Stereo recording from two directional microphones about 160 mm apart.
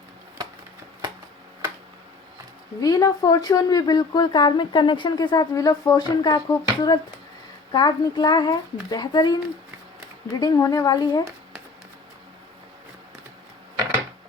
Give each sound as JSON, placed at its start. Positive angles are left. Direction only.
{"t": 2.8, "sound": "speech", "side_deg": 25}
{"t": 10.4, "sound": "speech", "side_deg": 25}